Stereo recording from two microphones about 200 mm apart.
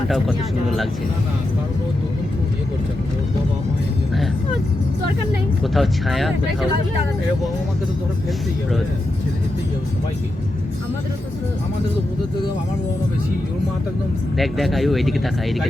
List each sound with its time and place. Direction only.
0.1 s speech: centre (ahead or behind)
5.7 s speech: centre (ahead or behind)
14.3 s speech: centre (ahead or behind)